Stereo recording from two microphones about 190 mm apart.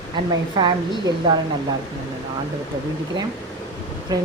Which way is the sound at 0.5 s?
25° right (ahead or behind).